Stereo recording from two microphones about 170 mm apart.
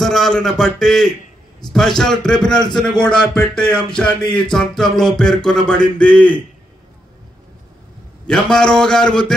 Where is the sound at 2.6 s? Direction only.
25° left (ahead or behind).